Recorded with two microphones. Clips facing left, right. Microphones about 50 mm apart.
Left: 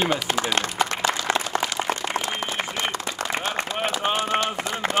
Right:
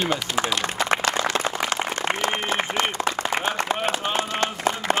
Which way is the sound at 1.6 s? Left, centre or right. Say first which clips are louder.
Right 1 dB; right.